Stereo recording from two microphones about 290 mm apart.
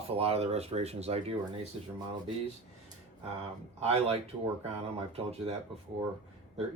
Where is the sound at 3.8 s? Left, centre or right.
Right.